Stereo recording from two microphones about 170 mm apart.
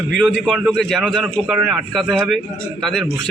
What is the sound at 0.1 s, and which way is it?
A man's voice, 5° left (ahead or behind).